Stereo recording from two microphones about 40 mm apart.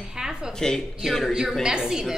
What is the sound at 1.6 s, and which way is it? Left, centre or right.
Speech, centre.